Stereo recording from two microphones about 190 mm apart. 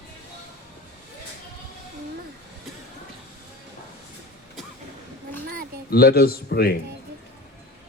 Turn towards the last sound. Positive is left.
turn(degrees=55)  # may be behind; listen again after turning